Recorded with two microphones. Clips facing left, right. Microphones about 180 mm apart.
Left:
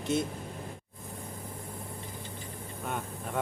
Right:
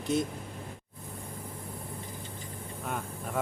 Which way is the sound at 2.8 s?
Centre (ahead or behind).